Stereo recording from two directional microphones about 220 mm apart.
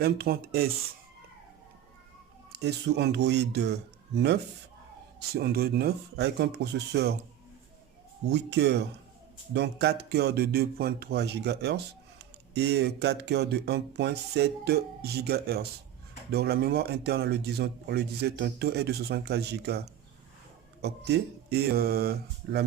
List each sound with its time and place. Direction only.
0.0 s speech: 45° right (ahead or behind)
2.5 s speech: 50° right (ahead or behind)
8.3 s speech: 50° right (ahead or behind)